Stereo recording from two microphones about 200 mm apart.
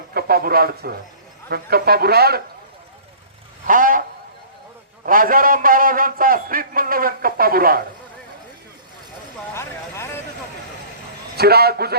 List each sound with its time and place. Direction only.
0.1 s a man's voice: 50° right (ahead or behind)
3.7 s a man's voice: 45° right (ahead or behind)
5.0 s a man's voice: 45° right (ahead or behind)
9.6 s vehicle: 15° left (ahead or behind)
11.3 s a man's voice: 50° right (ahead or behind)